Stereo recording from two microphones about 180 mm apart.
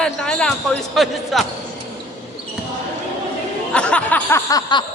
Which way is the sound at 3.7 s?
5° left (ahead or behind).